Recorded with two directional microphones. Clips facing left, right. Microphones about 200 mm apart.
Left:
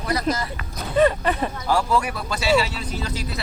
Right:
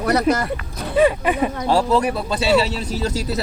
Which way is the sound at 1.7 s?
25° right (ahead or behind).